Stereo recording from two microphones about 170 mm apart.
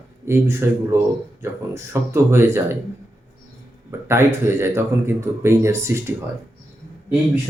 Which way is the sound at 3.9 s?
15° right (ahead or behind).